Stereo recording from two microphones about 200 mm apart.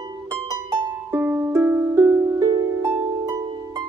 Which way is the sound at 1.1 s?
10° right (ahead or behind).